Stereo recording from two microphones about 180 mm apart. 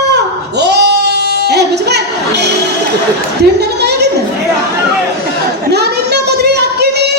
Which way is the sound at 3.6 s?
65° right (ahead or behind).